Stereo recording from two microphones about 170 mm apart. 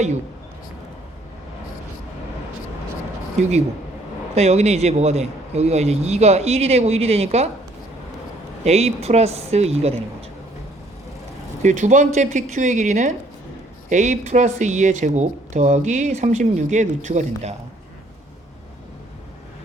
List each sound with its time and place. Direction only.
4.4 s a man's voice: 40° right (ahead or behind)
8.6 s a man's voice: 40° right (ahead or behind)
11.6 s speech: 45° right (ahead or behind)